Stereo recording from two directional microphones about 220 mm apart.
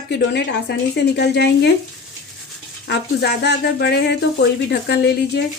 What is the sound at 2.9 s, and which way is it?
Speech, 50° left (ahead or behind).